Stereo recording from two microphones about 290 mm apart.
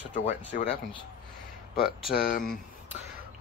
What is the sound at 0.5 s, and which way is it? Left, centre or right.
Speech, left.